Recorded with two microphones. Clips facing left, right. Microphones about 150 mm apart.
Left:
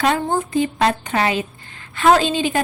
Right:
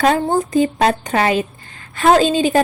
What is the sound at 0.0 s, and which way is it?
A woman's voice, 40° right (ahead or behind).